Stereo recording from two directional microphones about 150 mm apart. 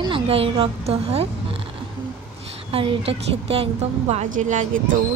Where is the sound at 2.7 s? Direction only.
40° right (ahead or behind).